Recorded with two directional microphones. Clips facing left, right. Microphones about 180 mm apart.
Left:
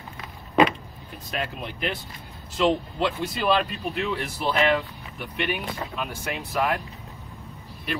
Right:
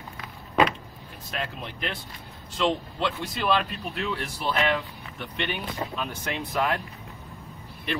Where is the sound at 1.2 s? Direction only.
5° left (ahead or behind).